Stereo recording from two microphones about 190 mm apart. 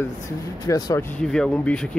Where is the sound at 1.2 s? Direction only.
5° left (ahead or behind).